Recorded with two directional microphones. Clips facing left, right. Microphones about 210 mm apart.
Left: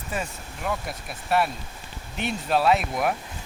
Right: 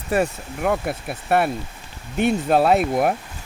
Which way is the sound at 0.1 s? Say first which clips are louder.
Right 11 dB; 60° right (ahead or behind).